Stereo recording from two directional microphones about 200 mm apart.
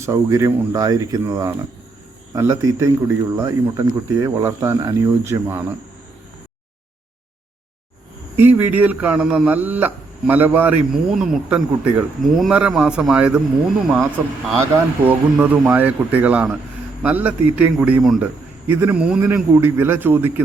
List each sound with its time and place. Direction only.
0.0 s a man's voice: 15° right (ahead or behind)
8.4 s a man's voice: 10° right (ahead or behind)